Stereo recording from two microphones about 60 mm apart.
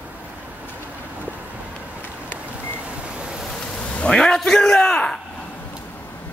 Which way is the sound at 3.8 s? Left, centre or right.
Centre.